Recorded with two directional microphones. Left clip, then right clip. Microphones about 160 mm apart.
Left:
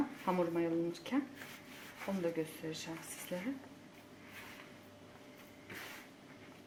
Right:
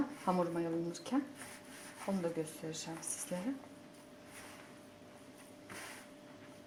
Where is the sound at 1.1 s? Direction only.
25° right (ahead or behind).